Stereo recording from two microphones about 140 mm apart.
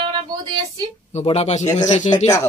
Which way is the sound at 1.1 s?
50° left (ahead or behind).